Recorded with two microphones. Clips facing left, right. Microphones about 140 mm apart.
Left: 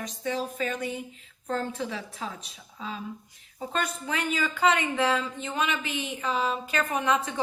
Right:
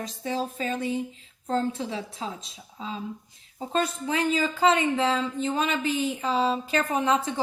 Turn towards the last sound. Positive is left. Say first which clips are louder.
# right 2 dB
turn(degrees=-30)  # may be behind; listen again after turning